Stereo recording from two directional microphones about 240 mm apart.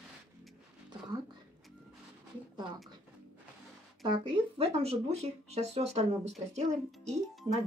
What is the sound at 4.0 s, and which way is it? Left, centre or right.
Speech, right.